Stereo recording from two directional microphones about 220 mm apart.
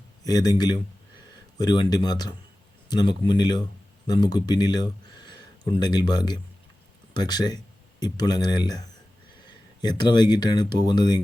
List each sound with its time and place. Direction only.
0.3 s speech: 20° left (ahead or behind)
9.8 s speech: 20° left (ahead or behind)